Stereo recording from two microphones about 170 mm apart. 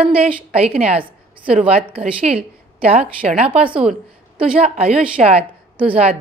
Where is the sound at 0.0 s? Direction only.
35° right (ahead or behind).